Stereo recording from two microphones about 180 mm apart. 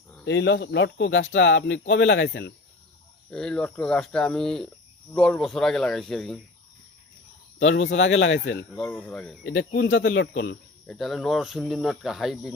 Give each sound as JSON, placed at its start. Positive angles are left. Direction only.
{"t": 0.3, "sound": "speech", "side_deg": 80}
{"t": 3.2, "sound": "speech", "side_deg": 5}
{"t": 7.6, "sound": "speech", "side_deg": 90}
{"t": 8.7, "sound": "speech", "side_deg": 5}
{"t": 9.4, "sound": "speech", "side_deg": 75}
{"t": 10.8, "sound": "speech", "side_deg": 0}